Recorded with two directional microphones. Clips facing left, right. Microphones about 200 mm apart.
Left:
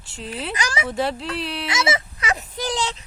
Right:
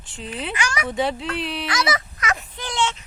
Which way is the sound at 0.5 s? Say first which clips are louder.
Even; 35° left (ahead or behind).